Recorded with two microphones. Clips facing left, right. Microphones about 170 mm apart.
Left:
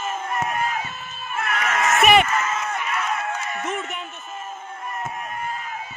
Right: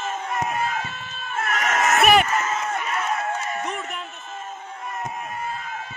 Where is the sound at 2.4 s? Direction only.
35° right (ahead or behind).